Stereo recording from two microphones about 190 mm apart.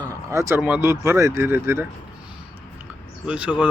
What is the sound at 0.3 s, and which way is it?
Speech, 15° right (ahead or behind).